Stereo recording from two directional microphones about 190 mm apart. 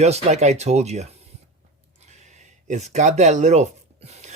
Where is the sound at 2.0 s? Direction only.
35° right (ahead or behind).